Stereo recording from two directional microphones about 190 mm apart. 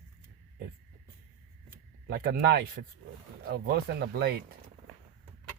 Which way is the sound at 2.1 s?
50° right (ahead or behind).